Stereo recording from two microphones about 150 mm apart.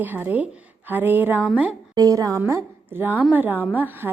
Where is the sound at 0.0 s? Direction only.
10° right (ahead or behind).